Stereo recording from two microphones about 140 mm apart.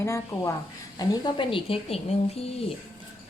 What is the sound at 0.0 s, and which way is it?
A woman's voice, 20° left (ahead or behind).